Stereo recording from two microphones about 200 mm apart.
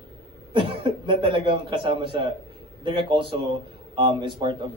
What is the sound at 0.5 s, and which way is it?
A man's voice, 25° right (ahead or behind).